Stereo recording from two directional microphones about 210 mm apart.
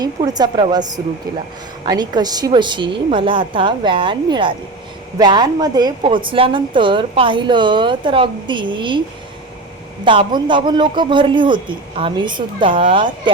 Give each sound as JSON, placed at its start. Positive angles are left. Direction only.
{"t": 0.0, "sound": "a woman's voice", "side_deg": -20}
{"t": 10.0, "sound": "a woman's voice", "side_deg": -20}